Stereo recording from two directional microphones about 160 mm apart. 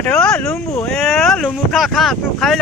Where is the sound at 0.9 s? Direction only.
Centre (ahead or behind).